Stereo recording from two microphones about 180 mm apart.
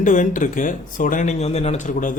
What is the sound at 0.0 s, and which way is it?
Speech, 45° left (ahead or behind).